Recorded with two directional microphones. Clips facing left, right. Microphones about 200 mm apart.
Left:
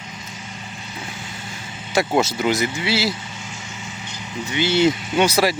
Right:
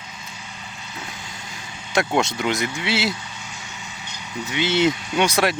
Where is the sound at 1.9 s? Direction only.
5° left (ahead or behind).